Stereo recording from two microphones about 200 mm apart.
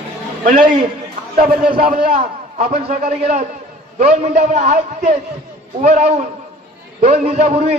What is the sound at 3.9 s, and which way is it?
A man's voice, 35° right (ahead or behind).